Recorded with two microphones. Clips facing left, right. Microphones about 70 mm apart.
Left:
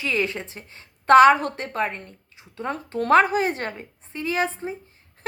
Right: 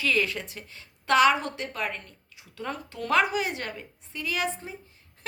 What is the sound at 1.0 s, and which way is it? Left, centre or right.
A woman's voice, left.